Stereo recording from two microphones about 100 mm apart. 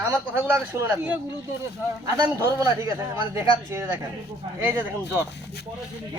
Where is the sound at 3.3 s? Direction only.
25° right (ahead or behind).